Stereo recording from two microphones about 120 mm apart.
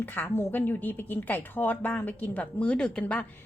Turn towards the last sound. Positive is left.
turn(degrees=10)  # may be behind; listen again after turning